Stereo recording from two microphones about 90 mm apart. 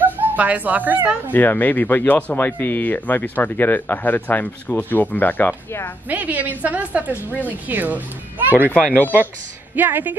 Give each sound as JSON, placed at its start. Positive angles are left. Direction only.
{"t": 0.0, "sound": "speech", "side_deg": -15}
{"t": 1.3, "sound": "speech", "side_deg": 20}
{"t": 6.0, "sound": "a woman's voice", "side_deg": -20}
{"t": 8.7, "sound": "speech", "side_deg": 15}
{"t": 9.8, "sound": "a woman's voice", "side_deg": -20}